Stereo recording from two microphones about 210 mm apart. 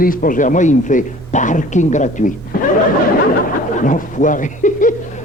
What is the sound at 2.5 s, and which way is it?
Snicker, 45° left (ahead or behind).